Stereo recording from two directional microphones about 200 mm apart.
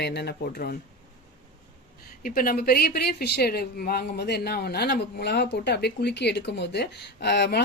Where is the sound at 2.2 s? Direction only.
45° left (ahead or behind).